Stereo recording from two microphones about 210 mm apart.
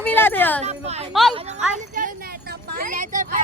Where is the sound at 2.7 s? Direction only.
40° right (ahead or behind).